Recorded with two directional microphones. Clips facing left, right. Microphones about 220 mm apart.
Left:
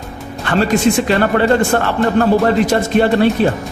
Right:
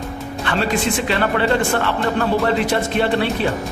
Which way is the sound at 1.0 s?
45° left (ahead or behind).